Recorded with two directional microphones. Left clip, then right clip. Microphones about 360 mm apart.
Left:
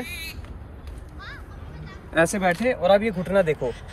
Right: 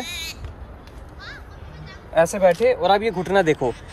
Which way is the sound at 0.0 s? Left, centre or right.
Centre.